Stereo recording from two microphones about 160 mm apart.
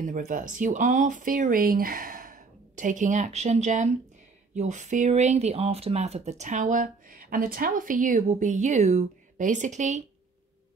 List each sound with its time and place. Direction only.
0.0 s speech: 55° right (ahead or behind)